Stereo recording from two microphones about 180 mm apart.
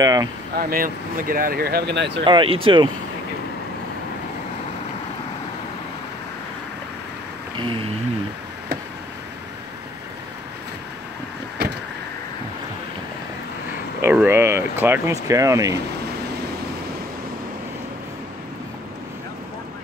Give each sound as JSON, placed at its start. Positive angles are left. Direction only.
{"t": 0.0, "sound": "speech", "side_deg": -20}
{"t": 0.6, "sound": "speech", "side_deg": -55}
{"t": 2.2, "sound": "speech", "side_deg": -30}
{"t": 7.5, "sound": "a sound", "side_deg": -30}
{"t": 14.0, "sound": "speech", "side_deg": -15}